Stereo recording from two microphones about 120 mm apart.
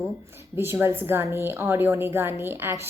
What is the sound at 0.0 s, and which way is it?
A woman's voice, 20° right (ahead or behind).